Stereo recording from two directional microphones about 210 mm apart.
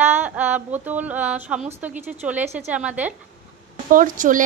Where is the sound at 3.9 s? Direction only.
40° right (ahead or behind).